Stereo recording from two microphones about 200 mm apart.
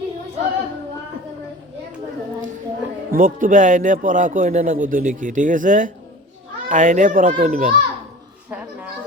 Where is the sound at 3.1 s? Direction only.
45° right (ahead or behind).